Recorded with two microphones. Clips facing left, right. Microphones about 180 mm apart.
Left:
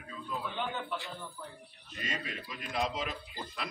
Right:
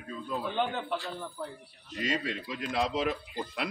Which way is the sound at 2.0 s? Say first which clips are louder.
Right 8 dB; 80° right.